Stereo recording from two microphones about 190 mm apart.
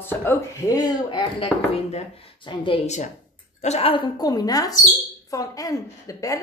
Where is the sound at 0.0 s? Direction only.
10° left (ahead or behind).